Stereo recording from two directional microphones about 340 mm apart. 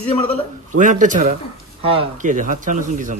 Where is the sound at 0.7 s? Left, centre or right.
Right.